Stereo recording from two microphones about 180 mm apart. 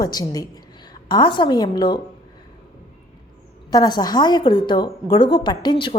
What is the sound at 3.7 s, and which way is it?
A woman's voice, 20° left (ahead or behind).